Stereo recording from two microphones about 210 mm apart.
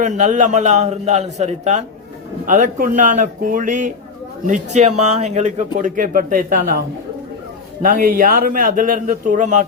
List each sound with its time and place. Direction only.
0.0 s speech: 35° right (ahead or behind)
7.8 s speech: 40° right (ahead or behind)